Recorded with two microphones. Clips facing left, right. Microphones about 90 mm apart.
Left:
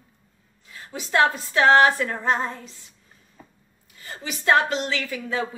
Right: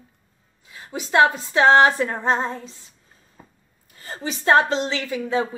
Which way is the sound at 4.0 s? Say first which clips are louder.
Right 4 dB; 35° right (ahead or behind).